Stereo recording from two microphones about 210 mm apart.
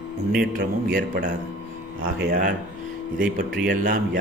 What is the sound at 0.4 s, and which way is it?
Speech, 45° right (ahead or behind).